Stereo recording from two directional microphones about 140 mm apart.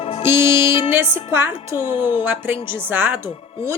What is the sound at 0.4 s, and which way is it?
Mantra, 35° left (ahead or behind).